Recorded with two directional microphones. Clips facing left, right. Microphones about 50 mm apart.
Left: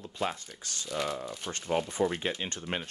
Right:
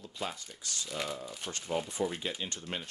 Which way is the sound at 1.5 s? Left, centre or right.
Left.